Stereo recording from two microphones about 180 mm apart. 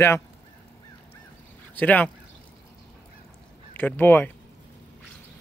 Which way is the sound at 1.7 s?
10° left (ahead or behind).